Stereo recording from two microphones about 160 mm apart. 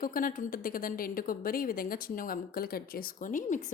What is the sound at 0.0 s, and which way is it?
A woman's voice, 60° left (ahead or behind).